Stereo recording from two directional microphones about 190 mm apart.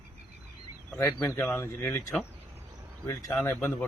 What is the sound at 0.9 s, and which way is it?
Speech, 10° left (ahead or behind).